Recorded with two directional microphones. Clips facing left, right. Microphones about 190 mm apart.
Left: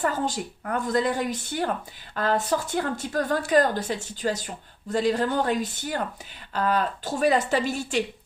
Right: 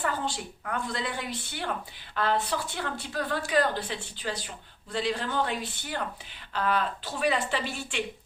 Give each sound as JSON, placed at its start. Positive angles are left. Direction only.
{"t": 0.0, "sound": "speech", "side_deg": 45}